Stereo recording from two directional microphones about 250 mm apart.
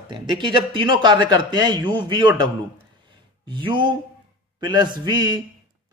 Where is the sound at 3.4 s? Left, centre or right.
Centre.